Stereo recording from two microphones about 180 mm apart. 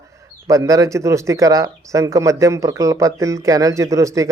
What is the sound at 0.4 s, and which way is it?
Speech, 15° right (ahead or behind).